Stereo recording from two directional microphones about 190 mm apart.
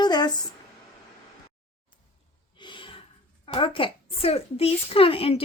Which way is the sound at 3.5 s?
30° left (ahead or behind).